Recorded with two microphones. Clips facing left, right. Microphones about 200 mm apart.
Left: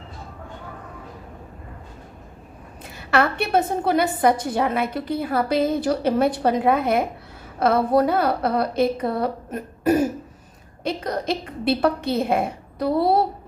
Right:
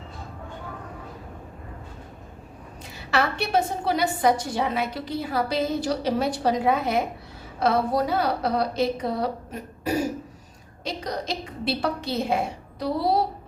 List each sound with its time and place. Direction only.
3.1 s a woman's voice: 55° left (ahead or behind)